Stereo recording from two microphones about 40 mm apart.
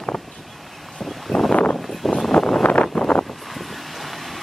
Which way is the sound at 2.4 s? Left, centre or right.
Left.